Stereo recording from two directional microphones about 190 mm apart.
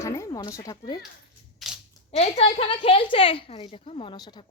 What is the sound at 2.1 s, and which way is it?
A woman's voice, 30° left (ahead or behind).